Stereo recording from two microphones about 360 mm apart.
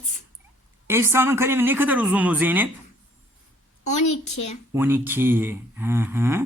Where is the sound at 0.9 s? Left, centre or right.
Centre.